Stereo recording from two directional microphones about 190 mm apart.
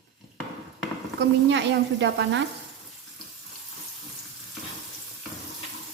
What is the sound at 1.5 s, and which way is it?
Speech, 70° right (ahead or behind).